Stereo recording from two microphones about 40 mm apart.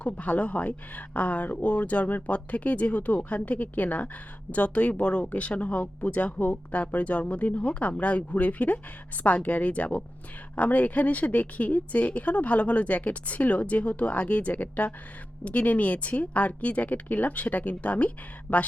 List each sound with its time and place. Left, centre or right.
0.0 s speech: left
18.5 s speech: centre